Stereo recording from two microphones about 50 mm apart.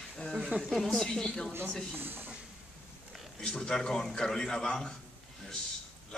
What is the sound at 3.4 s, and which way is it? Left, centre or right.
A man's voice, centre.